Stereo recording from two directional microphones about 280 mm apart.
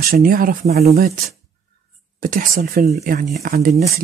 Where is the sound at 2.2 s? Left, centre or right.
Right.